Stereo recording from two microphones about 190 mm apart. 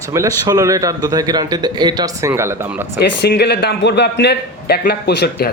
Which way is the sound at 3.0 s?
60° left (ahead or behind).